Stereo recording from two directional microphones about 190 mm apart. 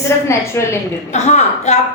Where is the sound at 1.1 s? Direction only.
35° left (ahead or behind).